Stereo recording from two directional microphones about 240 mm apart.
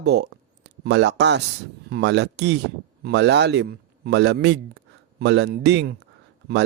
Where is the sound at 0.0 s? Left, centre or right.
Right.